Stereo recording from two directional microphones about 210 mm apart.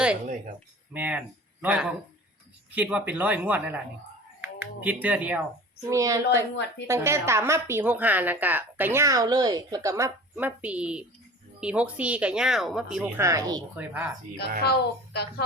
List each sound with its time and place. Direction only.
0.9 s speech: 5° right (ahead or behind)
14.6 s a woman's voice: 50° left (ahead or behind)